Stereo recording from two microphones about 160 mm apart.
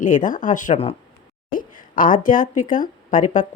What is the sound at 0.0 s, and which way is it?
A woman's voice, 55° left (ahead or behind).